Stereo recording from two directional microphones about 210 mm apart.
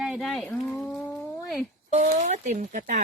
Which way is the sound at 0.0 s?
Centre (ahead or behind).